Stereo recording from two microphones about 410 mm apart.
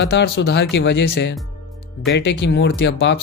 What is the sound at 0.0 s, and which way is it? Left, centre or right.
Speech, left.